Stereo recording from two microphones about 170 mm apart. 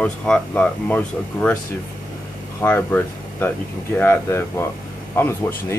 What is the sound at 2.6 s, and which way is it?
Speech, 10° left (ahead or behind).